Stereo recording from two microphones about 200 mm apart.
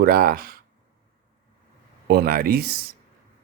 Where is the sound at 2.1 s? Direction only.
50° right (ahead or behind).